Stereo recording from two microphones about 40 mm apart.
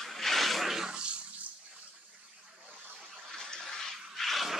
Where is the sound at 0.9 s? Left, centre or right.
Right.